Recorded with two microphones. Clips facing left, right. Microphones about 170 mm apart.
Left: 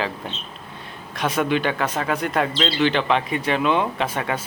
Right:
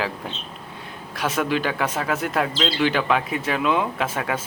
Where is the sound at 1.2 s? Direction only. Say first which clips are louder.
Left 2 dB; 5° right (ahead or behind).